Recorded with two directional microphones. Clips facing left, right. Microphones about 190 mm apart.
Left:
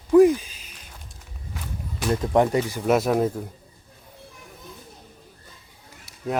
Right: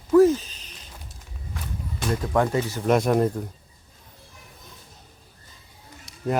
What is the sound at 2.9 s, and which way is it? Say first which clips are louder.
Speech: right 1 dB; 5° left (ahead or behind).